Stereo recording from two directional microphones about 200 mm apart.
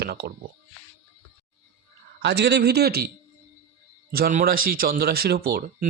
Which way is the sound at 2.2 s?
55° right (ahead or behind).